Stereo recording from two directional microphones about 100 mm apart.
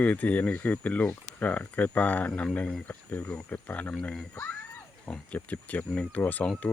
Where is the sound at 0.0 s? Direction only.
15° left (ahead or behind).